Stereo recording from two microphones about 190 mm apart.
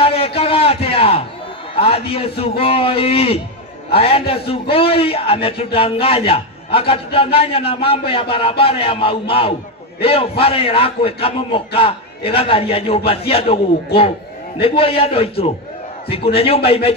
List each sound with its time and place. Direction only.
0.0 s a sound: 30° left (ahead or behind)
1.8 s a man's voice: 30° left (ahead or behind)
14.6 s a man's voice: 30° left (ahead or behind)